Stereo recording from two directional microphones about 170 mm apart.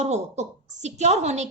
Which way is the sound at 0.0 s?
40° right (ahead or behind).